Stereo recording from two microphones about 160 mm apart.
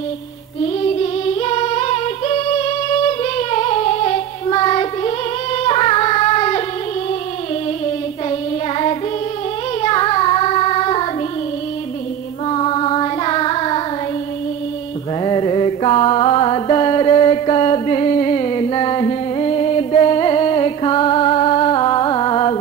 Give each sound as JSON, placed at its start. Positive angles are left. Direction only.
{"t": 0.9, "sound": "singing", "side_deg": 35}
{"t": 8.3, "sound": "child singing", "side_deg": 35}
{"t": 12.4, "sound": "child singing", "side_deg": 35}
{"t": 15.2, "sound": "mantra", "side_deg": 30}